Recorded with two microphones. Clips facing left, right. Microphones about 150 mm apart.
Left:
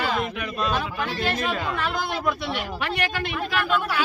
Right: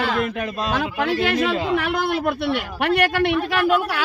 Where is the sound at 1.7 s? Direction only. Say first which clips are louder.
Right 6 dB; 65° right (ahead or behind).